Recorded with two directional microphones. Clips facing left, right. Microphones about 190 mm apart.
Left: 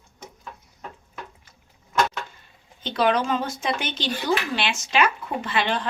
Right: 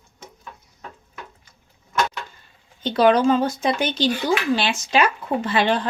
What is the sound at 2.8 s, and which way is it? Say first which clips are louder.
Speech: right 6 dB; 35° right (ahead or behind).